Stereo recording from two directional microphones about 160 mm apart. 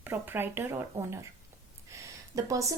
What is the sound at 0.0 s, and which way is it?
A woman's voice, 10° right (ahead or behind).